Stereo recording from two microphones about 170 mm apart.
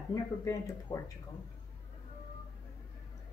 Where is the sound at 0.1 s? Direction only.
20° left (ahead or behind).